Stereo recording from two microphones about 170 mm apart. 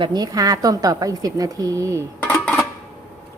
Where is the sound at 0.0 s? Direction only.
25° right (ahead or behind).